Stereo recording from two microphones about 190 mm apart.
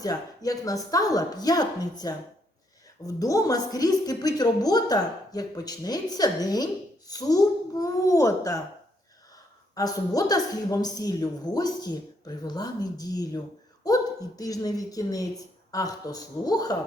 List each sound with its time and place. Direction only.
0.0 s a woman's voice: 20° left (ahead or behind)
9.7 s a woman's voice: 20° left (ahead or behind)